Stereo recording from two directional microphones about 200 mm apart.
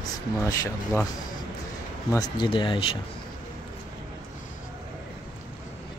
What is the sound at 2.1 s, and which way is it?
Speech, 20° left (ahead or behind).